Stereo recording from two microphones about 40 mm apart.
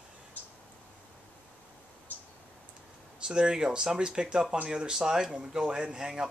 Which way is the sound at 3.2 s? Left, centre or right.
Right.